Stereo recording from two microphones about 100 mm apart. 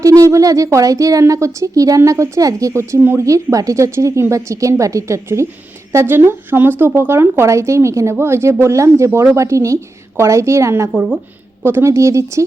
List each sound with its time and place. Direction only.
0.0 s speech: 35° right (ahead or behind)